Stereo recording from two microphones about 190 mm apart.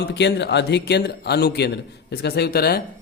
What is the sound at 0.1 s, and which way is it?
Speech, 65° left (ahead or behind).